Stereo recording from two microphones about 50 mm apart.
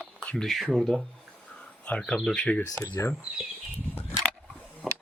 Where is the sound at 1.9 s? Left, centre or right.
Left.